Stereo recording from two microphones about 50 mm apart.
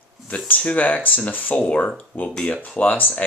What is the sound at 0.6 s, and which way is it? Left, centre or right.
Speech, left.